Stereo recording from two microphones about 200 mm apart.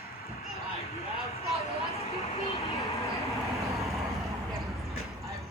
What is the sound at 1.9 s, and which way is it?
Vehicle, 30° left (ahead or behind).